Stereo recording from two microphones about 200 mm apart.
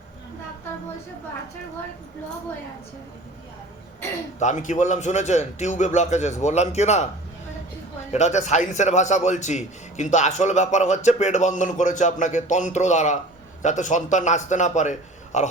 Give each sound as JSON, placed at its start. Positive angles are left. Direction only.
{"t": 4.4, "sound": "a man's voice", "side_deg": 35}
{"t": 8.1, "sound": "a man's voice", "side_deg": 35}